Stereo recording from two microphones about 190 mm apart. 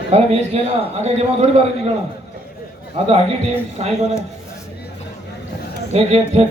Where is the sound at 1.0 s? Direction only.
35° right (ahead or behind).